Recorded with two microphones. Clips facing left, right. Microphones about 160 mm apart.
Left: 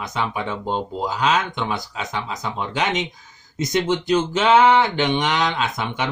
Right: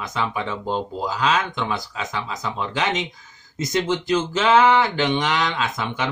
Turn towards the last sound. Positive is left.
turn(degrees=20)  # may be behind; listen again after turning